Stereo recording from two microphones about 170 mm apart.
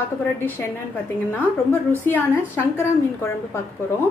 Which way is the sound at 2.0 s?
10° left (ahead or behind).